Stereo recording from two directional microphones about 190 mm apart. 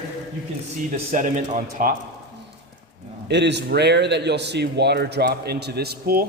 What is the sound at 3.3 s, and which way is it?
Speech, 65° right (ahead or behind).